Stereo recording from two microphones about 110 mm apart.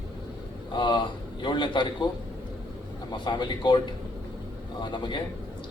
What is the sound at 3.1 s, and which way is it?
A man's voice, 40° left (ahead or behind).